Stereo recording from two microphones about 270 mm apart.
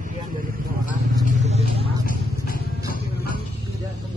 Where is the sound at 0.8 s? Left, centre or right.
Left.